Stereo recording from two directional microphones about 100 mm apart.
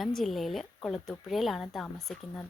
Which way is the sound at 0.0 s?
Centre (ahead or behind).